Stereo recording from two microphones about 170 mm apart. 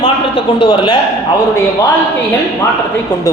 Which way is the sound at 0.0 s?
25° left (ahead or behind).